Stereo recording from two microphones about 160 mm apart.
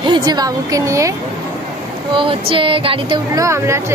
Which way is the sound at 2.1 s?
35° right (ahead or behind).